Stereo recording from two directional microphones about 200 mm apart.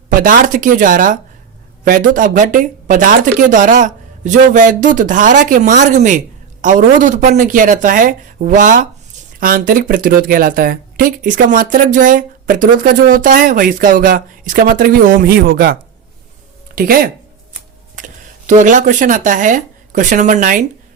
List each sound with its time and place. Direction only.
0.1 s speech: 40° right (ahead or behind)
16.7 s speech: 45° right (ahead or behind)